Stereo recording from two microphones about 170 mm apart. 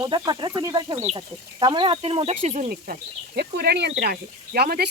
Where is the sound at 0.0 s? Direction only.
25° right (ahead or behind).